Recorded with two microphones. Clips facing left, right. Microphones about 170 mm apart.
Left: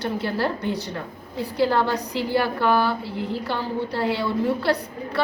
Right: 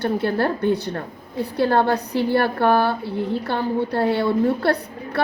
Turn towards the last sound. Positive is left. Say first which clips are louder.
# right 1 dB
turn(degrees=-60)  # may be behind; listen again after turning